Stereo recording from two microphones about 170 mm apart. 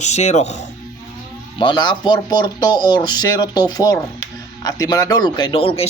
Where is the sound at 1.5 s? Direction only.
25° left (ahead or behind).